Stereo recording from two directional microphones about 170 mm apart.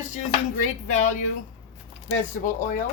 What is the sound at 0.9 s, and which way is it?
Speech, 45° left (ahead or behind).